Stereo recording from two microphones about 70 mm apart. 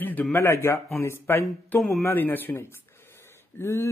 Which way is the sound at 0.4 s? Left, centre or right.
Left.